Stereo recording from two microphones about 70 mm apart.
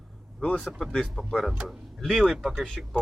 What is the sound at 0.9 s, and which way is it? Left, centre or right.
Speech, centre.